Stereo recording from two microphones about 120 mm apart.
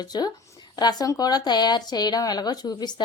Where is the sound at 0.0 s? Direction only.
35° left (ahead or behind).